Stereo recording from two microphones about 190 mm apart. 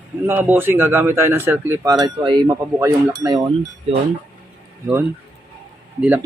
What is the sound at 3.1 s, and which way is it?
Cutlery, 20° right (ahead or behind).